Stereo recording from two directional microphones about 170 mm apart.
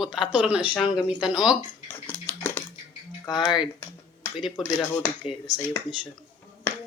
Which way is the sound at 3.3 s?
25° left (ahead or behind).